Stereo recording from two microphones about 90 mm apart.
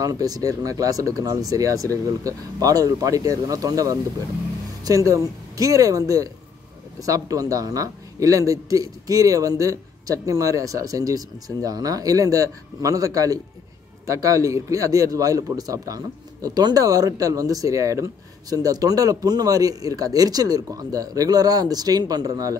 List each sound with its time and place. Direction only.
0.0 s a man's voice: 45° right (ahead or behind)